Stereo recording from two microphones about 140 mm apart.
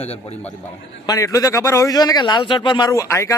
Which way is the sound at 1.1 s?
25° left (ahead or behind).